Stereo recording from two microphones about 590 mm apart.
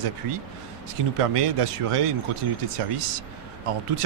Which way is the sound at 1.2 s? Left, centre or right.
Right.